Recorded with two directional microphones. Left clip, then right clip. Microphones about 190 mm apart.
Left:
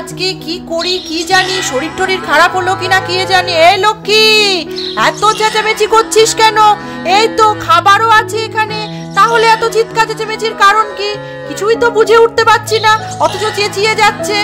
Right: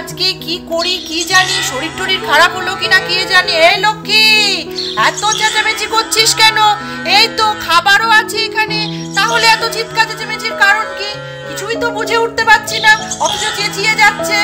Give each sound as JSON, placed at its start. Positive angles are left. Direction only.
{"t": 0.2, "sound": "a woman's voice", "side_deg": 60}
{"t": 1.5, "sound": "a woman's voice", "side_deg": 35}
{"t": 1.8, "sound": "a woman's voice", "side_deg": 55}